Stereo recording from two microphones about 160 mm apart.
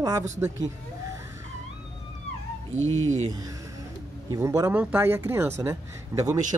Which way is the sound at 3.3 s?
25° right (ahead or behind).